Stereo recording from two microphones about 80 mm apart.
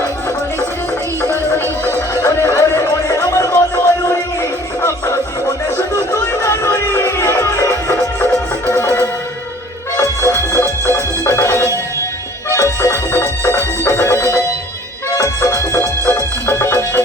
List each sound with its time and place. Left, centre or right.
1.8 s music: left
4.8 s music: left
10.0 s music: left
10.5 s music: left
16.0 s music: left